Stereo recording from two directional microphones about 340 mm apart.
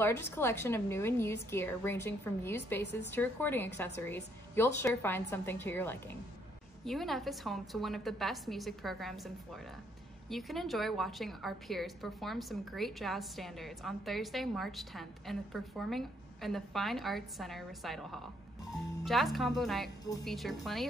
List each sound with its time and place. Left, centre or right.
0.0 s a woman's voice: centre